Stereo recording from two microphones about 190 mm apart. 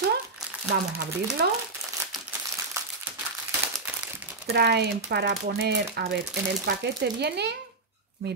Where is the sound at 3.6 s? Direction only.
10° right (ahead or behind).